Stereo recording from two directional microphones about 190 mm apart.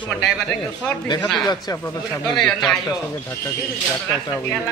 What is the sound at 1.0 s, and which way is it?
Speech, 25° left (ahead or behind).